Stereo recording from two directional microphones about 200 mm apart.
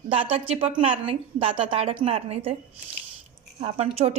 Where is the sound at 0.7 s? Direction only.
25° right (ahead or behind).